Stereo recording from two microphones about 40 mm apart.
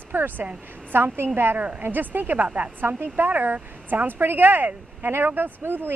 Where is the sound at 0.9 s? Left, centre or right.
Right.